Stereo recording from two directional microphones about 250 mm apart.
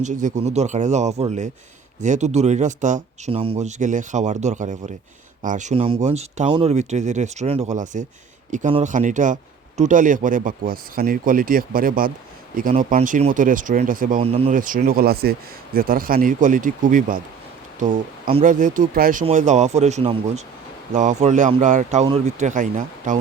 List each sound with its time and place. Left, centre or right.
0.0 s speech: right
18.3 s speech: right